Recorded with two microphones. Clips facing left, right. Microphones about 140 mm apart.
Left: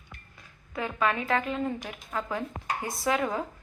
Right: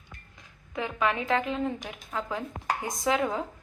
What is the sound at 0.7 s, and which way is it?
A woman's voice, 15° right (ahead or behind).